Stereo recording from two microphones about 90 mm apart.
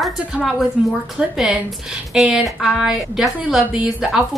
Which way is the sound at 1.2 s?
10° right (ahead or behind).